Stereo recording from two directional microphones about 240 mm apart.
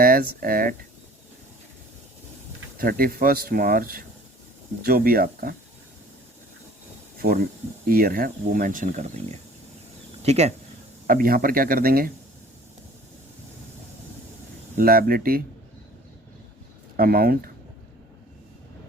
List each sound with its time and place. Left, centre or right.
0.0 s speech: right
2.7 s speech: right
7.2 s speech: right
14.8 s speech: right
17.0 s speech: right